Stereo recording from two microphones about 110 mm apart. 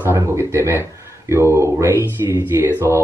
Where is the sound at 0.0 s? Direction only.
20° right (ahead or behind).